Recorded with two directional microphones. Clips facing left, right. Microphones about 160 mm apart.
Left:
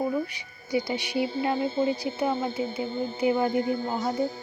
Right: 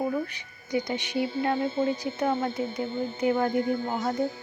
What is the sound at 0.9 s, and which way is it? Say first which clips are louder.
Speech: left 1 dB; 10° left (ahead or behind).